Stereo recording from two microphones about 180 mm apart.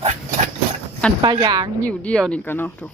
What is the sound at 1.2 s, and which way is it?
Speech, 25° right (ahead or behind).